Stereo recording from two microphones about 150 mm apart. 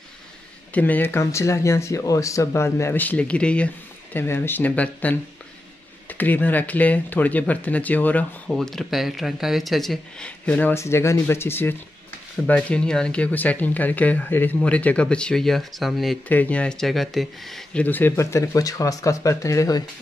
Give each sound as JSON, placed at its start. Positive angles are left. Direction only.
{"t": 0.7, "sound": "speech", "side_deg": 10}